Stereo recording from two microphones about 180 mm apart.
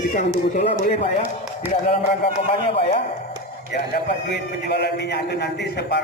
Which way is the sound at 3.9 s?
65° left (ahead or behind).